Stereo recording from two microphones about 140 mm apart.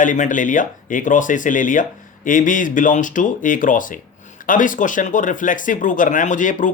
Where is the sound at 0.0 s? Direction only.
65° left (ahead or behind).